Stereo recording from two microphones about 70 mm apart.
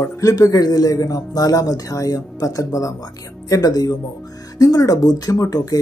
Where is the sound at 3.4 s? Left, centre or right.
Left.